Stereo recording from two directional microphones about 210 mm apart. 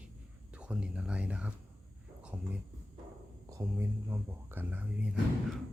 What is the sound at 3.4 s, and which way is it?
Speech, 15° right (ahead or behind).